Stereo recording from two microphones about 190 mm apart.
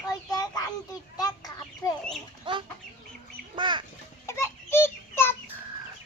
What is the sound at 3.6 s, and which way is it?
Bird, 25° right (ahead or behind).